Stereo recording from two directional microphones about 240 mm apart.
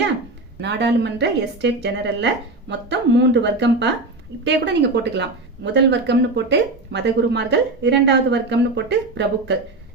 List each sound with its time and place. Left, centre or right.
0.6 s speech: right